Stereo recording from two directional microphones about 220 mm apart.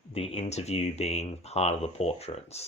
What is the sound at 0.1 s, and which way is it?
Speech, 25° left (ahead or behind).